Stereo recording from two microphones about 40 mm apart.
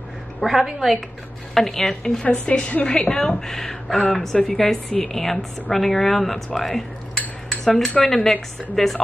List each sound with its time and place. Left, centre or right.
0.4 s a woman's voice: centre
1.5 s speech: centre
2.2 s a woman's voice: left; by 6.8 s centre
7.4 s cutlery: centre
8.0 s speech: centre